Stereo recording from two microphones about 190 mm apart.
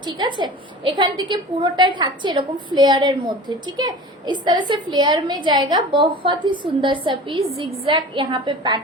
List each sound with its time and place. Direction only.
0.0 s a woman's voice: 25° right (ahead or behind)